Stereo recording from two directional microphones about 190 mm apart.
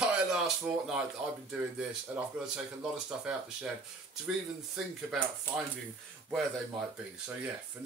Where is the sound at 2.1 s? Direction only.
10° right (ahead or behind).